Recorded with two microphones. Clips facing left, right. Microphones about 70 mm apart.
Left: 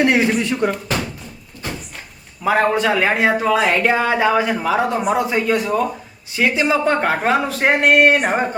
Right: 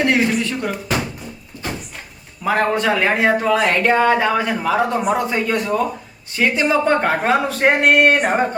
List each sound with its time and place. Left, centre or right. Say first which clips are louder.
0.0 s speech: left 1 dB; centre
0.3 s speech: left 3 dB; centre
0.7 s a sound: even; centre
2.4 s speech: left 1 dB; centre